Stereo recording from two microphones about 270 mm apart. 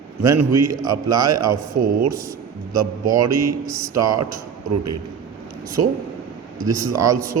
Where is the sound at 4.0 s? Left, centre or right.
Right.